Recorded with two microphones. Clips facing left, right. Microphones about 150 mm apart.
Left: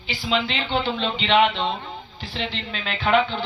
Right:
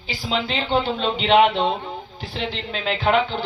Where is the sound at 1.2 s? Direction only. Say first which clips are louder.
Right 3 dB; 45° right (ahead or behind).